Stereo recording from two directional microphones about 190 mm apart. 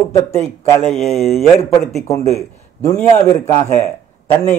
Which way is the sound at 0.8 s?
Centre (ahead or behind).